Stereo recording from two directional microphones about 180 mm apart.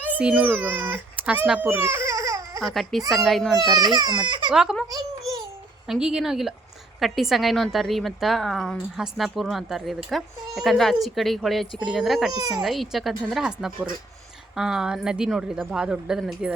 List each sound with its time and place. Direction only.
0.2 s a child's voice: 10° right (ahead or behind)
2.6 s a woman's voice: centre (ahead or behind)
3.6 s speech: 20° right (ahead or behind)
4.5 s a woman's voice: centre (ahead or behind)
5.9 s a woman's voice: 5° right (ahead or behind)
12.3 s speech: 20° right (ahead or behind)
12.6 s a woman's voice: centre (ahead or behind)